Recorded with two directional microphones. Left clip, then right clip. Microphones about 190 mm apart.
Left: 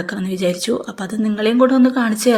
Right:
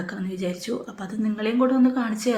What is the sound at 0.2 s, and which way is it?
Speech, 50° left (ahead or behind).